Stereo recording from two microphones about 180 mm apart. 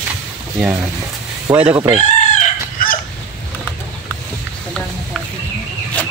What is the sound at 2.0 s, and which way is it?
Chicken, 40° left (ahead or behind).